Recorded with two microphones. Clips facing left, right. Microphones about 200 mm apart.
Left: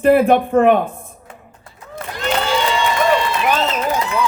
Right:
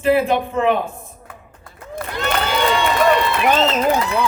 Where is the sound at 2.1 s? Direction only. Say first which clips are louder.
Left 2 dB; 60° right (ahead or behind).